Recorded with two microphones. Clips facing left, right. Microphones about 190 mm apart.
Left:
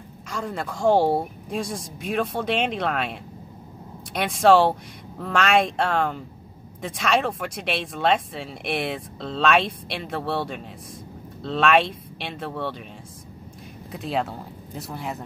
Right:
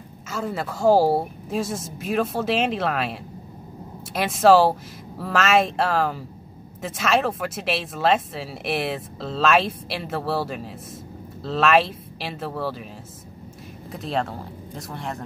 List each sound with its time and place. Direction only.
0.3 s speech: 5° right (ahead or behind)
13.9 s speech: centre (ahead or behind)